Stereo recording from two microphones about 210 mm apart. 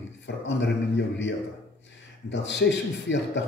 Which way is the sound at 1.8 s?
55° left (ahead or behind).